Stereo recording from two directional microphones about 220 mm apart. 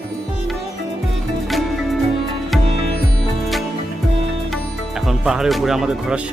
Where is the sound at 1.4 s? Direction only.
Centre (ahead or behind).